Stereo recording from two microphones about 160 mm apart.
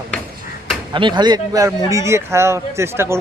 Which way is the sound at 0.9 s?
30° right (ahead or behind).